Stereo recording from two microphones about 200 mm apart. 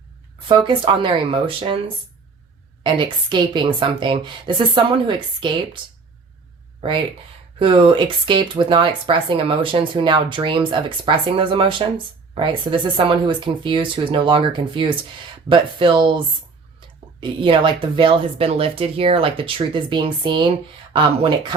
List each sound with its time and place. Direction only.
0.4 s speech: 25° right (ahead or behind)
2.8 s speech: 25° right (ahead or behind)
7.6 s speech: 25° right (ahead or behind)